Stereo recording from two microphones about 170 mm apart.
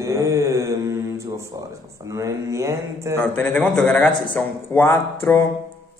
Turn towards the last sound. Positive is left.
turn(degrees=15)  # may be behind; listen again after turning